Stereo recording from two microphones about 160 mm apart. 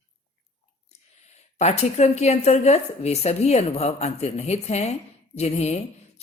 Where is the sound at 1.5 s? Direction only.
45° left (ahead or behind).